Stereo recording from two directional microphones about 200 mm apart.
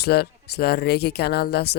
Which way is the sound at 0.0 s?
55° left (ahead or behind).